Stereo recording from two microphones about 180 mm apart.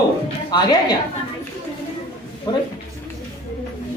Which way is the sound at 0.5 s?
25° left (ahead or behind).